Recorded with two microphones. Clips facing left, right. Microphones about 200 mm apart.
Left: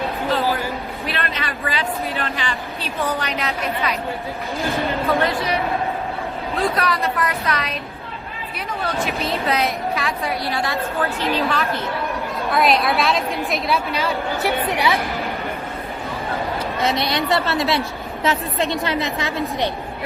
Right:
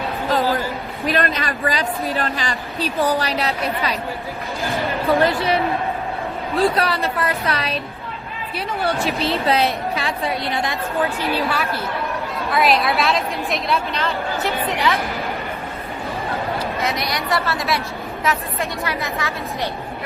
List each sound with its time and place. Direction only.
1.0 s speech: 40° right (ahead or behind)
5.0 s a woman's voice: 30° right (ahead or behind)
6.6 s a woman's voice: 30° right (ahead or behind); by 14.1 s centre (ahead or behind)
14.4 s a woman's voice: 15° left (ahead or behind)
16.8 s a woman's voice: 30° left (ahead or behind)